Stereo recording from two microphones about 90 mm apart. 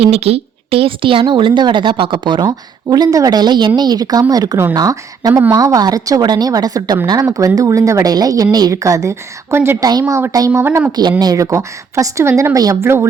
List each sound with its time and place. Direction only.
0.0 s a woman's voice: 90° right; by 2.4 s 65° right (ahead or behind)
2.4 s a woman's voice: 50° right (ahead or behind)
5.3 s a woman's voice: 25° right (ahead or behind)
5.5 s a woman's voice: 45° right (ahead or behind)
10.3 s speech: 40° right (ahead or behind)
10.6 s a woman's voice: 25° right (ahead or behind)
11.2 s a woman's voice: 45° right (ahead or behind)